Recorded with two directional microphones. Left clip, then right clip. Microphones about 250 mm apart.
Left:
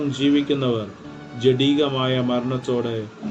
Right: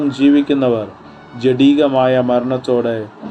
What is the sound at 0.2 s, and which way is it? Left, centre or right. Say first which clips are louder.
Speech: right 7 dB; right.